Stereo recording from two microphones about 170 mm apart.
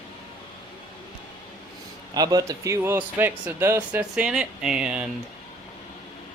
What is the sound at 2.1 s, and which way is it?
Speech, 20° right (ahead or behind).